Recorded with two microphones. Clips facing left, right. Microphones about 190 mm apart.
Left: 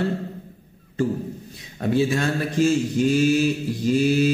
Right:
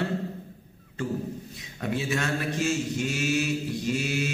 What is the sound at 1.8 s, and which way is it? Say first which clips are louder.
Mantra: left 8 dB; 35° left (ahead or behind).